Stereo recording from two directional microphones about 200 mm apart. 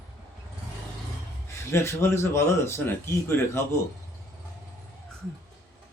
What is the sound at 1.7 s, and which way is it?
Speech, 10° left (ahead or behind).